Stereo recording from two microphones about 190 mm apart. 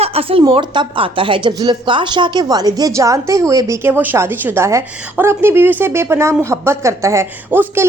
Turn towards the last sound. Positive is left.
turn(degrees=-10)  # may be behind; listen again after turning